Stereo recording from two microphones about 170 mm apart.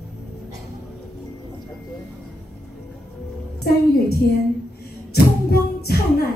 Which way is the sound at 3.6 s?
65° left (ahead or behind).